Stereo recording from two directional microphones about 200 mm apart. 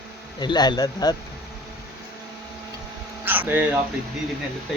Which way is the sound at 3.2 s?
10° right (ahead or behind).